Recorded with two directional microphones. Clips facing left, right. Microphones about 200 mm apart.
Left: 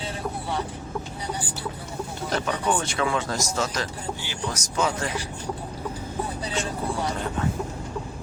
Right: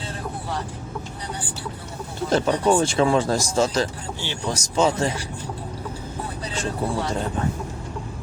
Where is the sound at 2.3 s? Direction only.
30° right (ahead or behind).